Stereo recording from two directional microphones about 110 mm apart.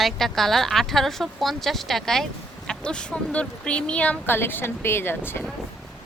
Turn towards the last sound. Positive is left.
turn(degrees=20)  # may be behind; listen again after turning